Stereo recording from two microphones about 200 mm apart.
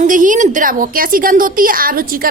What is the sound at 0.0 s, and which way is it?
A woman's voice, 40° right (ahead or behind).